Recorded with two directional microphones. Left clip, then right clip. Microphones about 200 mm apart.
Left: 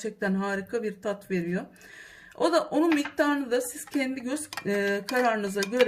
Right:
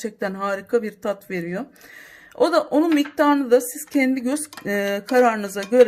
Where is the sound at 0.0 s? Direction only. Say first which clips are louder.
Right 5 dB; 45° right (ahead or behind).